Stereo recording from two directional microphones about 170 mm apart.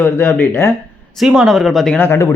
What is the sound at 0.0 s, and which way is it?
Speech, 10° left (ahead or behind).